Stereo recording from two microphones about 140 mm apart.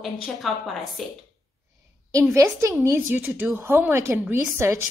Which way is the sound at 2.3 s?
20° right (ahead or behind).